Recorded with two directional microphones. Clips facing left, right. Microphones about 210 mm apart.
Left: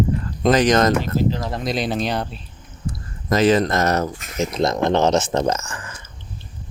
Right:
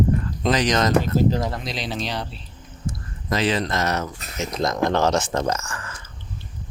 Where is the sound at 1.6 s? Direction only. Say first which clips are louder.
Left 6 dB; 50° left (ahead or behind).